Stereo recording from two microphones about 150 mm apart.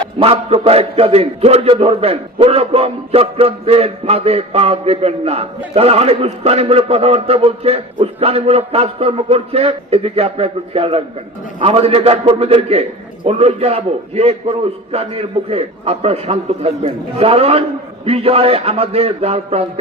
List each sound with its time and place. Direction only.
0.2 s a man's voice: 40° right (ahead or behind)